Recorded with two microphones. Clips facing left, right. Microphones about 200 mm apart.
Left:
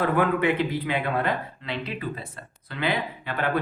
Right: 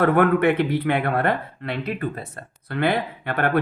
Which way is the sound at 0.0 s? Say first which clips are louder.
Right 5 dB; 60° right (ahead or behind).